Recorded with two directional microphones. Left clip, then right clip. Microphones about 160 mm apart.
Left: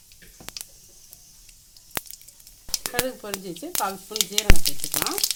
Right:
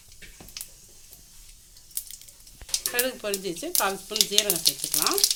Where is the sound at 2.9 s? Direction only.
40° left (ahead or behind).